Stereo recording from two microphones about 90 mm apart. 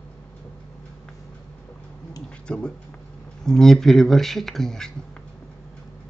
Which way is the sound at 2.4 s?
10° left (ahead or behind).